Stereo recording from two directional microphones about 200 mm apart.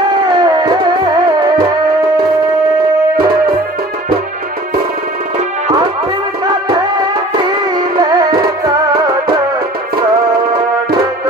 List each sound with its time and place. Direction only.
0.3 s music: 20° right (ahead or behind)
8.0 s music: 20° right (ahead or behind)